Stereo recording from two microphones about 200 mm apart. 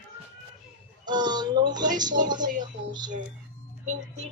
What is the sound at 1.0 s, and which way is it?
A woman's voice, 20° right (ahead or behind).